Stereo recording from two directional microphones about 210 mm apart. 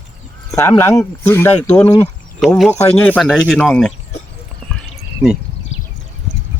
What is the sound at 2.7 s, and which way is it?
Speech, 30° left (ahead or behind).